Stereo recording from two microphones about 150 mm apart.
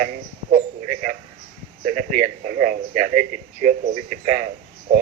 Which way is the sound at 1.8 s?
60° right (ahead or behind).